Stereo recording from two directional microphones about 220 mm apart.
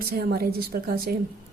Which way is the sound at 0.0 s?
45° right (ahead or behind).